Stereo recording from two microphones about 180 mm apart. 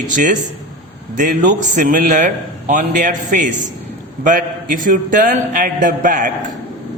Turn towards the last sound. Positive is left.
turn(degrees=-45)  # may be behind; listen again after turning